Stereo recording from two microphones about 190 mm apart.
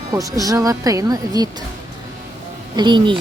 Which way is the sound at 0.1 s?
20° right (ahead or behind).